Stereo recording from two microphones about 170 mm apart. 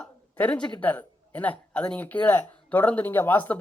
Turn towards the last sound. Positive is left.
turn(degrees=10)  # may be behind; listen again after turning